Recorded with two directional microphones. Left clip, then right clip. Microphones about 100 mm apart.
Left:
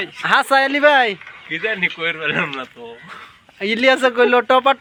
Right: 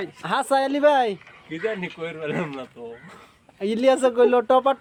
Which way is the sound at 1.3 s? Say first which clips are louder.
Left 6 dB; 20° right (ahead or behind).